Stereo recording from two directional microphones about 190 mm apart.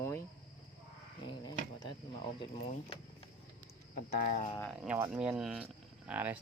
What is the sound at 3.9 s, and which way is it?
Speech, 50° left (ahead or behind).